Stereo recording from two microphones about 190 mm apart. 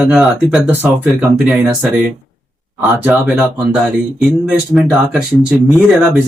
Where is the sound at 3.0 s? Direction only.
5° right (ahead or behind).